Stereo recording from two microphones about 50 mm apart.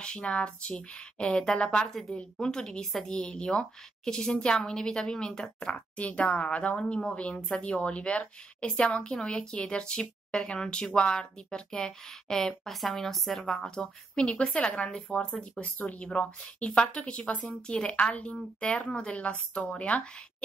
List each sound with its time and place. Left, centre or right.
0.0 s a woman's voice: centre
1.9 s a woman's voice: centre
13.6 s a woman's voice: centre
17.4 s a woman's voice: centre